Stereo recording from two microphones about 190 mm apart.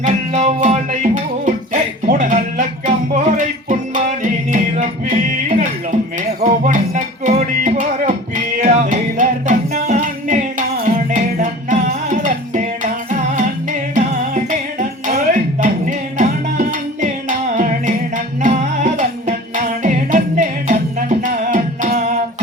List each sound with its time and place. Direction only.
0.0 s music: 35° right (ahead or behind)